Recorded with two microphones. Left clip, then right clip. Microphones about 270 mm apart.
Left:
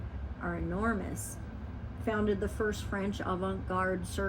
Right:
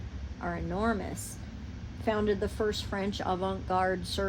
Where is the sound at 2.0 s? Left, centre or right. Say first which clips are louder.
Right 3 dB; right.